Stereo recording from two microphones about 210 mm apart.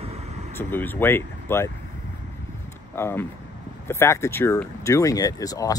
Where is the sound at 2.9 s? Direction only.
10° left (ahead or behind).